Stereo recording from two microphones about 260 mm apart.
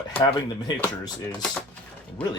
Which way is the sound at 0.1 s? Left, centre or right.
Centre.